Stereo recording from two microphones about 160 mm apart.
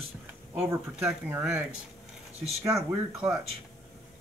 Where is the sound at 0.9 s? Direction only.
5° right (ahead or behind).